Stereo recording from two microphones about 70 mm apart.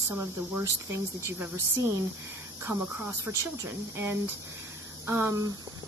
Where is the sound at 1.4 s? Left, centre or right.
Right.